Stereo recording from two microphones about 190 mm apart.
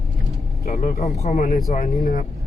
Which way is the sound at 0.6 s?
40° left (ahead or behind).